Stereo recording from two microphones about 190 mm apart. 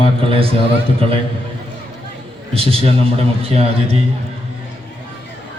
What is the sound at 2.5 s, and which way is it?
A man's voice, 30° right (ahead or behind).